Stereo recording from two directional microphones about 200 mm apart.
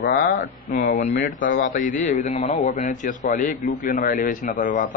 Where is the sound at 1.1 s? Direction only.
50° left (ahead or behind).